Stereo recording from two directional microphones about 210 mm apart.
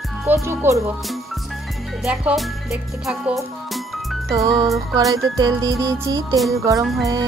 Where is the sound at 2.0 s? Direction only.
Centre (ahead or behind).